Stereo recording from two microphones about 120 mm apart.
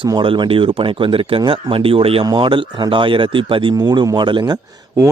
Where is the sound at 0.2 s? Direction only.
45° right (ahead or behind).